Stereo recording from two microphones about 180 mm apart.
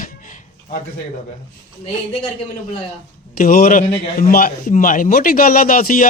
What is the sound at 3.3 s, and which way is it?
A man's voice, 50° left (ahead or behind).